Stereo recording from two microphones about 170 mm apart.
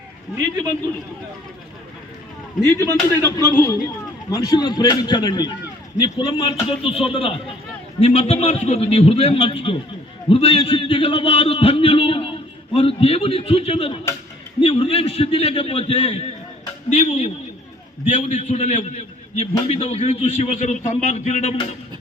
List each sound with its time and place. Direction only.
2.9 s a man's voice: 15° left (ahead or behind); by 21.6 s 40° left (ahead or behind)